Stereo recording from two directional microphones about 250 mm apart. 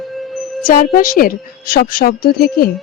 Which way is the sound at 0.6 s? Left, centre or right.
Left.